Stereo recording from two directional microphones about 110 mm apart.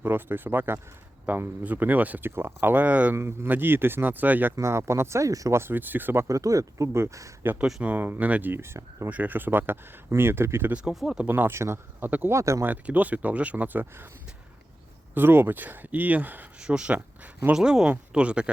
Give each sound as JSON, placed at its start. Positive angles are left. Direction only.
{"t": 0.0, "sound": "speech", "side_deg": -20}
{"t": 6.2, "sound": "speech", "side_deg": -30}
{"t": 7.4, "sound": "speech", "side_deg": -20}
{"t": 11.3, "sound": "speech", "side_deg": -20}
{"t": 12.6, "sound": "speech", "side_deg": -15}
{"t": 15.1, "sound": "speech", "side_deg": -20}